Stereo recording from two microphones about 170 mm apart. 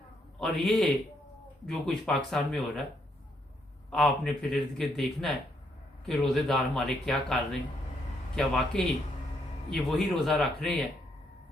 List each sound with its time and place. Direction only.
0.3 s a man's voice: centre (ahead or behind)
3.9 s speech: centre (ahead or behind)